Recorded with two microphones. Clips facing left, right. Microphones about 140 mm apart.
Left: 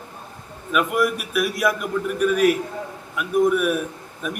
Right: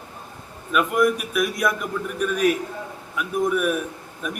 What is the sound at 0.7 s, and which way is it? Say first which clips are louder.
A man's voice: right 1 dB; 5° left (ahead or behind).